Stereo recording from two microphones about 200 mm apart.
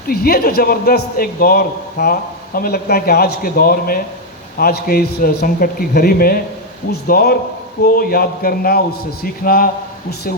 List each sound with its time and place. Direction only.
0.1 s a man's voice: 50° left (ahead or behind)